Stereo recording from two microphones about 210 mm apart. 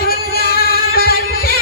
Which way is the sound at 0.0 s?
45° left (ahead or behind).